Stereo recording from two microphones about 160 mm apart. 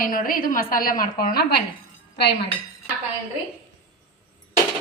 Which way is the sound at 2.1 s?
90° left.